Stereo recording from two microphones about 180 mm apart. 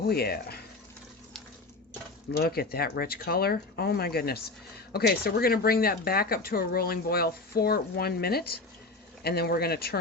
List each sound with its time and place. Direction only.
0.1 s speech: 60° left (ahead or behind)
2.3 s speech: 60° left (ahead or behind)